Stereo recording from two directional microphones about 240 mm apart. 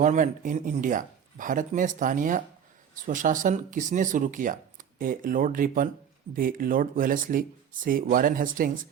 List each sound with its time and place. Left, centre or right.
0.0 s speech: right